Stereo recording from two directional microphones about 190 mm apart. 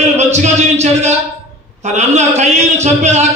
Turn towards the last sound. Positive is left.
turn(degrees=-35)  # may be behind; listen again after turning